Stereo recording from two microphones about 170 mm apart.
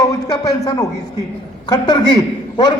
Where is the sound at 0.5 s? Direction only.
20° left (ahead or behind).